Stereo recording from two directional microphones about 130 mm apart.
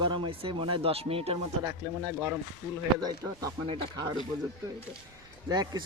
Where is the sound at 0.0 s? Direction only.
40° right (ahead or behind).